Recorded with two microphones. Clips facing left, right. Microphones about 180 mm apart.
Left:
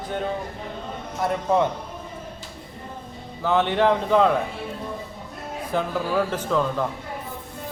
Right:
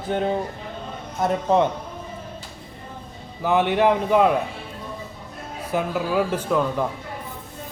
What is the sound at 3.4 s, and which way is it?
Speech, 10° right (ahead or behind).